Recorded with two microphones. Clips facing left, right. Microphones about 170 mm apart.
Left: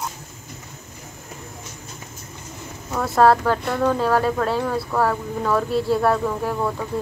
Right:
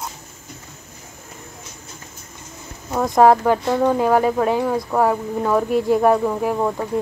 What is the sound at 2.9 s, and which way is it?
Speech, 15° right (ahead or behind).